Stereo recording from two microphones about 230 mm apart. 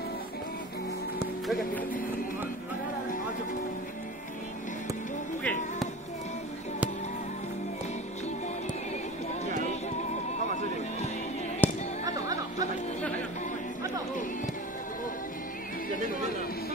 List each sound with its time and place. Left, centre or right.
1.5 s speech: centre
10.5 s music: left
11.6 s music: centre
12.0 s music: centre